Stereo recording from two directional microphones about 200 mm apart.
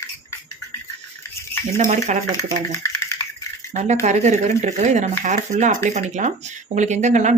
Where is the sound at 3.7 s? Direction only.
35° right (ahead or behind).